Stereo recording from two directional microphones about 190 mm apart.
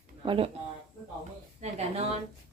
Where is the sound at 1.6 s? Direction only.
35° right (ahead or behind).